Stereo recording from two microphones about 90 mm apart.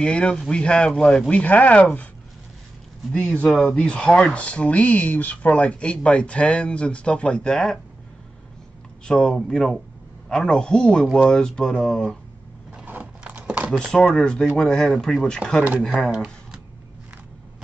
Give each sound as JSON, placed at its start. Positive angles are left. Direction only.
{"t": 0.0, "sound": "speech", "side_deg": 10}
{"t": 3.1, "sound": "speech", "side_deg": 10}
{"t": 3.7, "sound": "speech", "side_deg": 10}
{"t": 9.0, "sound": "speech", "side_deg": 5}
{"t": 12.7, "sound": "a sound", "side_deg": -20}
{"t": 13.7, "sound": "speech", "side_deg": 5}
{"t": 15.9, "sound": "speech", "side_deg": -5}